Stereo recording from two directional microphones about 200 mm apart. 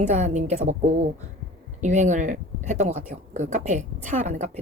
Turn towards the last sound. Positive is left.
turn(degrees=-40)  # may be behind; listen again after turning